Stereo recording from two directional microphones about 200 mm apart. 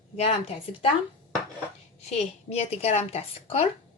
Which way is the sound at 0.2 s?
30° left (ahead or behind).